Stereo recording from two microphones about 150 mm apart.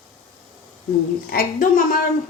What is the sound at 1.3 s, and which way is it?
Speech, 70° left (ahead or behind).